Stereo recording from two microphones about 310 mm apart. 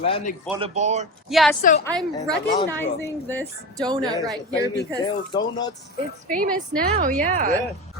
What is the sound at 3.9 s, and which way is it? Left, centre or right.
Speech, centre.